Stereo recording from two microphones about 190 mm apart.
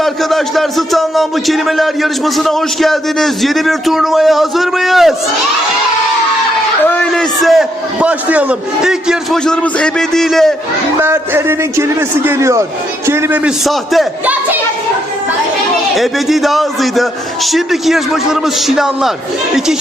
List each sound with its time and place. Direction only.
0.0 s a man's voice: centre (ahead or behind)
6.8 s a man's voice: 5° left (ahead or behind)
10.9 s a man's voice: 15° right (ahead or behind)
16.0 s a man's voice: centre (ahead or behind)